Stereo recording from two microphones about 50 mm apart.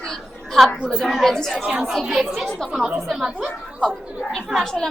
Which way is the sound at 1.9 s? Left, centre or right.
Centre.